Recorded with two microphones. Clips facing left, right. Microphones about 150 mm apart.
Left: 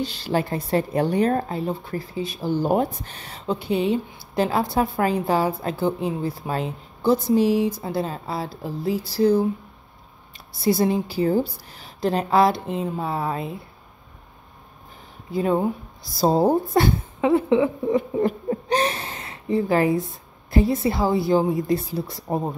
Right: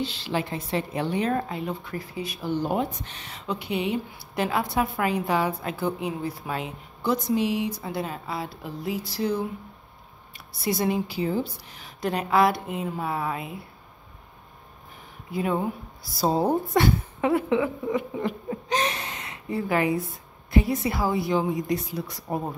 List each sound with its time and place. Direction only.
0.0 s a woman's voice: 40° left (ahead or behind)
10.6 s a woman's voice: 30° left (ahead or behind)
15.3 s a woman's voice: 30° left (ahead or behind)